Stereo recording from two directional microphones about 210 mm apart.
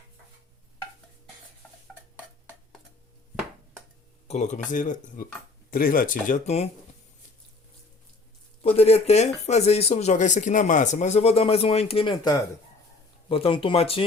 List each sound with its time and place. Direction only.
4.3 s speech: 35° left (ahead or behind)
8.6 s speech: 30° left (ahead or behind)